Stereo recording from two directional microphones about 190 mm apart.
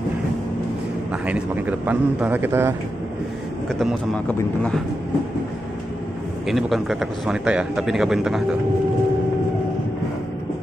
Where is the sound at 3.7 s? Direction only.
Centre (ahead or behind).